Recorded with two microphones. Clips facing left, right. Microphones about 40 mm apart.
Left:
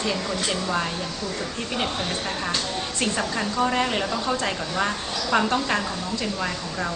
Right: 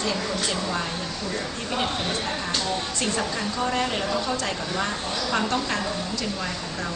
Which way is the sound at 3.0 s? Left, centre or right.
Centre.